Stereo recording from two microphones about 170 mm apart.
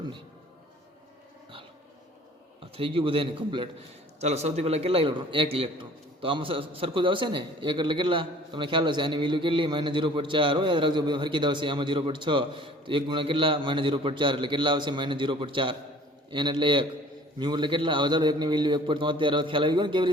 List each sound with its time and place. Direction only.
2.7 s a man's voice: 30° right (ahead or behind)